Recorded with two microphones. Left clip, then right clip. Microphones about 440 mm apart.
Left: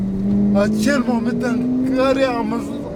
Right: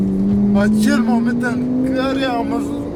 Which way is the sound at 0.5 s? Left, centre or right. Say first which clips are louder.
Even; left.